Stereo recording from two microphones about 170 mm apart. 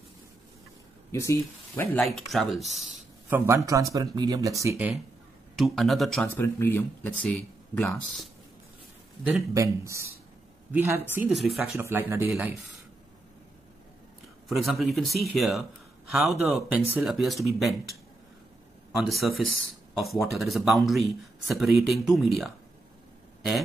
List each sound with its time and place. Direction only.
1.1 s speech: 15° left (ahead or behind)
2.0 s speech: centre (ahead or behind)
3.3 s speech: 15° right (ahead or behind)
5.6 s speech: centre (ahead or behind)
6.3 s speech: 15° left (ahead or behind)
7.2 s speech: 5° left (ahead or behind)
9.5 s speech: 20° right (ahead or behind); by 11.8 s centre (ahead or behind)
11.8 s speech: 15° right (ahead or behind)
12.3 s speech: centre (ahead or behind)
14.5 s speech: centre (ahead or behind)